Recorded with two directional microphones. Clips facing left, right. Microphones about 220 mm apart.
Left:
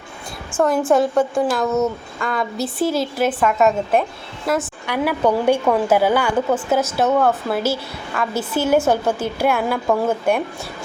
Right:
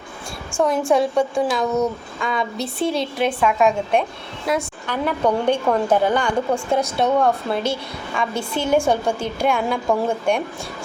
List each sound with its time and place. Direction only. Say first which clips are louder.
0.9 s a woman's voice: left 2 dB; centre (ahead or behind)